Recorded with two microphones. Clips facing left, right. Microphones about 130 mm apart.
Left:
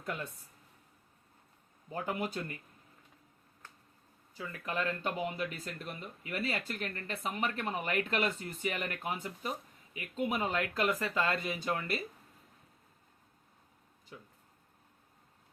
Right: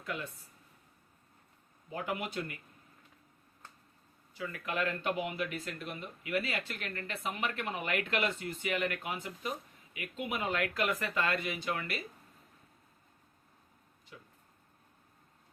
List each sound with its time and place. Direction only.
1.9 s speech: 40° left (ahead or behind)
4.4 s speech: 30° left (ahead or behind)